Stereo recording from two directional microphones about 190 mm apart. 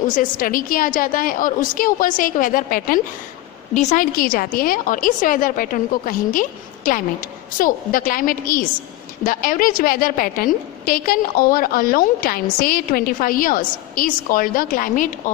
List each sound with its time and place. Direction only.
0.1 s a woman's voice: 45° left (ahead or behind)